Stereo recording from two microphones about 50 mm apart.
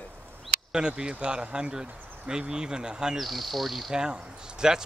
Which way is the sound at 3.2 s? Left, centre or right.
Centre.